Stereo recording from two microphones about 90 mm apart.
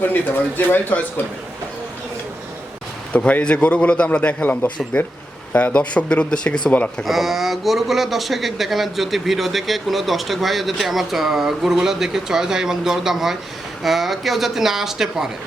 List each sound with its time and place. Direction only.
0.0 s speech: 20° left (ahead or behind)
3.1 s a man's voice: 15° left (ahead or behind)
7.0 s speech: centre (ahead or behind)